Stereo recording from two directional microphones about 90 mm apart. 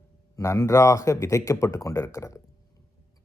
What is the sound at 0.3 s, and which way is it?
Speech, 40° left (ahead or behind).